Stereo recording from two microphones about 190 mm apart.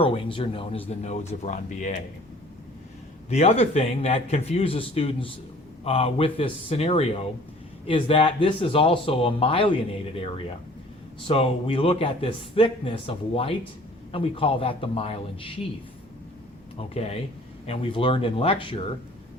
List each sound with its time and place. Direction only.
0.0 s a man's voice: 25° left (ahead or behind)
3.2 s a man's voice: 35° left (ahead or behind)
16.7 s a man's voice: 35° left (ahead or behind)